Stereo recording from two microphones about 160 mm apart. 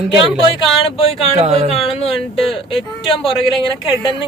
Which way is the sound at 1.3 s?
40° right (ahead or behind).